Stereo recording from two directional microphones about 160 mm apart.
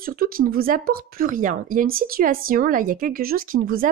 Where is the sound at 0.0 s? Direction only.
65° right (ahead or behind).